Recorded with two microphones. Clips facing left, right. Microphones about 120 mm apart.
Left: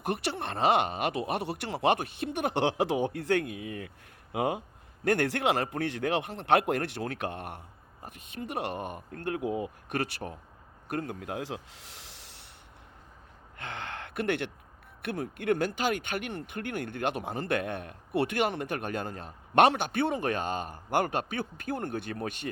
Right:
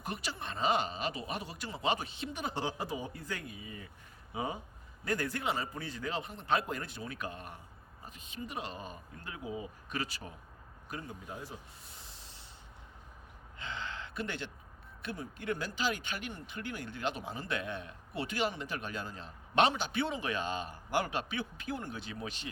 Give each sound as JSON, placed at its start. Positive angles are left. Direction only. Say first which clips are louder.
{"t": 0.0, "sound": "speech", "louder": "left 8 dB", "side_deg": 65}
{"t": 13.6, "sound": "speech", "louder": "left 3 dB", "side_deg": 60}